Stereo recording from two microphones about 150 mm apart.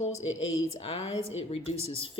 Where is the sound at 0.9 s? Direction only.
45° left (ahead or behind).